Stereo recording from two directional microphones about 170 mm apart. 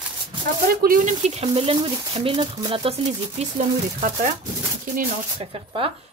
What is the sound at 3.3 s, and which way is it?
Speech, 50° right (ahead or behind).